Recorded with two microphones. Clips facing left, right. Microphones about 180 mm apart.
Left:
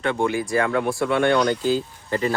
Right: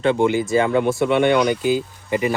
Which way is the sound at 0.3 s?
25° right (ahead or behind).